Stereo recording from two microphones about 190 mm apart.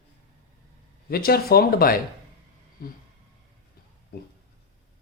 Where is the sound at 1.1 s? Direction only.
55° left (ahead or behind).